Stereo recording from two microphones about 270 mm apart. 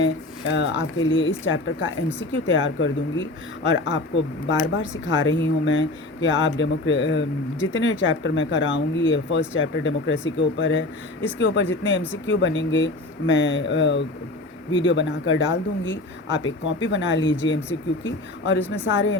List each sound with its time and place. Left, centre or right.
0.0 s speech: left